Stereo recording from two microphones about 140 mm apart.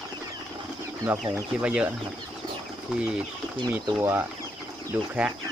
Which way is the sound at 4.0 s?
15° right (ahead or behind).